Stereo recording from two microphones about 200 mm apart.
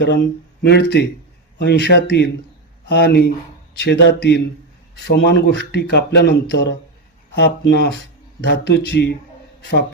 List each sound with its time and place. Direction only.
0.7 s speech: 60° left (ahead or behind)